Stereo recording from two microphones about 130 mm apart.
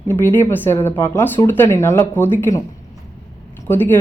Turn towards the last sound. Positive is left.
turn(degrees=15)  # may be behind; listen again after turning